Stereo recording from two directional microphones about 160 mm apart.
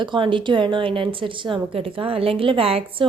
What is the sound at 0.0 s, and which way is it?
Speech, 30° right (ahead or behind).